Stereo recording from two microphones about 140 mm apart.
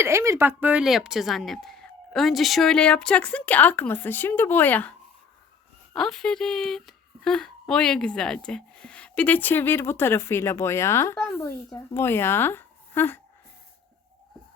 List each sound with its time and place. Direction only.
0.0 s speech: 20° right (ahead or behind); by 4.9 s 15° left (ahead or behind)
5.9 s speech: centre (ahead or behind)